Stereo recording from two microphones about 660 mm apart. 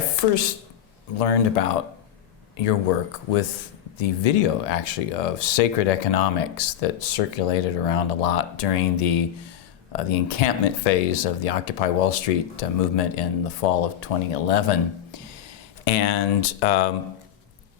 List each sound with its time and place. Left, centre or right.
0.2 s speech: left
3.9 s speech: left